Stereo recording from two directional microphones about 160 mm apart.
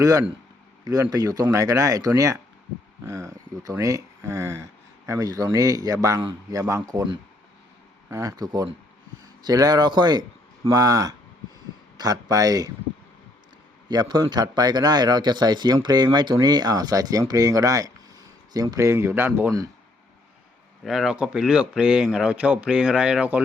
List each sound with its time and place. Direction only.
0.0 s a man's voice: 20° right (ahead or behind)
8.1 s a man's voice: 20° right (ahead or behind)
13.8 s a man's voice: 25° right (ahead or behind)
20.8 s speech: centre (ahead or behind)